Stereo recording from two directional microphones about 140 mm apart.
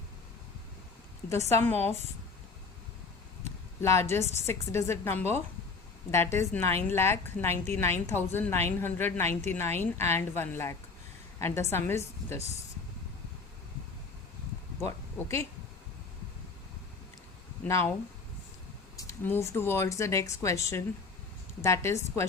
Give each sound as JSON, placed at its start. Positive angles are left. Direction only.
{"t": 1.3, "sound": "speech", "side_deg": 20}
{"t": 3.8, "sound": "speech", "side_deg": 20}
{"t": 14.8, "sound": "speech", "side_deg": 20}
{"t": 17.7, "sound": "speech", "side_deg": 20}
{"t": 18.9, "sound": "speech", "side_deg": 20}